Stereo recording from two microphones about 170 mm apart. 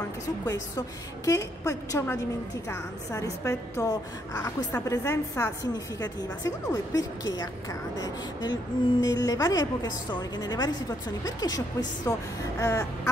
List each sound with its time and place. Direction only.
0.5 s a woman's voice: 20° left (ahead or behind)